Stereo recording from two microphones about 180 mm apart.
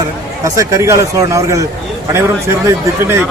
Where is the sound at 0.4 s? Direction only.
15° right (ahead or behind).